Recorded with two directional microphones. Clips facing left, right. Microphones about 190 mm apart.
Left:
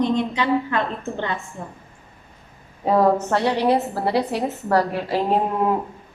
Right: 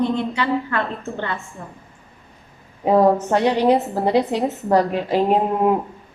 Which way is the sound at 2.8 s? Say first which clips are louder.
Right 2 dB; 15° right (ahead or behind).